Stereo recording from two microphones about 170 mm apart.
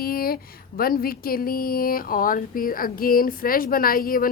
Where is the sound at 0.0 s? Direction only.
60° left (ahead or behind).